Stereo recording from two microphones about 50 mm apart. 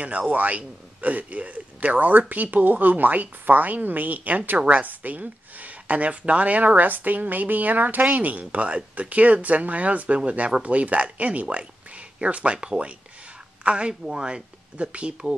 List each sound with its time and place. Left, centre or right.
0.3 s speech: right